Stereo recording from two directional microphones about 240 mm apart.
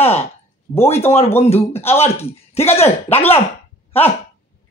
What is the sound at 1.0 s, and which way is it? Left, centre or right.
Speech, left.